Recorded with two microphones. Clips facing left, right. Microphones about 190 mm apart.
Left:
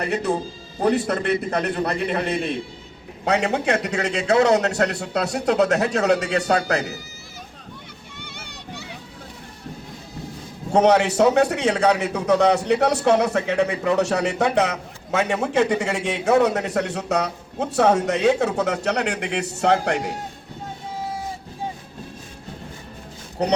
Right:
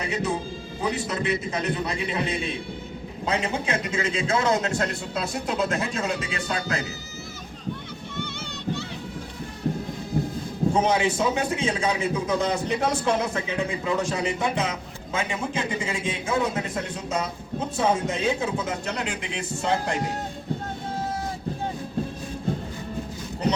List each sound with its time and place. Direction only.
0.0 s a man's voice: 60° left (ahead or behind)
3.2 s a man's voice: 70° left (ahead or behind)
10.7 s a man's voice: 70° left (ahead or behind)